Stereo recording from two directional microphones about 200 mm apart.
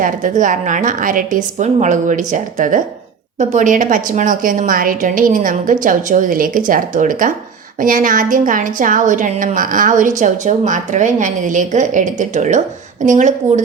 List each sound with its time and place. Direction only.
0.0 s a woman's voice: 40° right (ahead or behind)